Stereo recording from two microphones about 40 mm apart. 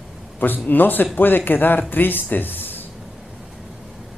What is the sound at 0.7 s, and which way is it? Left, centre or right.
A man's voice, left.